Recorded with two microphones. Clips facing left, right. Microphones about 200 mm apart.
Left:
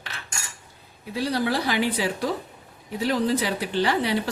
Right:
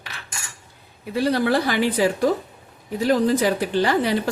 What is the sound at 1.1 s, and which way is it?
A woman's voice, 55° right (ahead or behind).